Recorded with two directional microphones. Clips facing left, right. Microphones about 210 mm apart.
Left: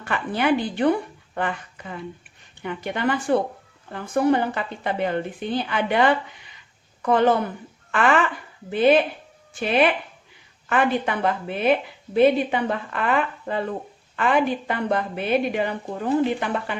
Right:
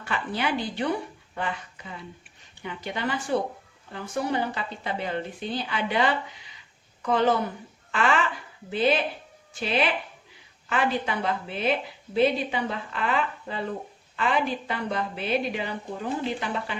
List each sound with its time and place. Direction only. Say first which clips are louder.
0.0 s a woman's voice: left 5 dB; 55° left (ahead or behind)
2.6 s a woman's voice: left 6 dB; 55° left (ahead or behind)